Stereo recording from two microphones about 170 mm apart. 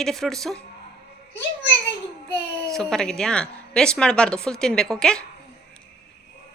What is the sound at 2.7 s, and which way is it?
A woman's voice, centre (ahead or behind).